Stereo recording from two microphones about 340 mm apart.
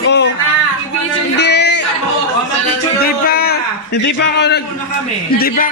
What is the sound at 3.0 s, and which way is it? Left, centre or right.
Speech, left.